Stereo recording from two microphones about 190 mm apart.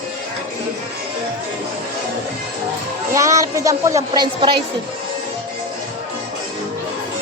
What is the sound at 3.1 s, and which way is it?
A woman's voice, 15° right (ahead or behind).